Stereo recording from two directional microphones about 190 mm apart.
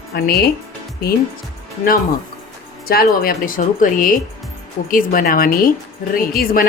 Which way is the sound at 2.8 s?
50° left (ahead or behind).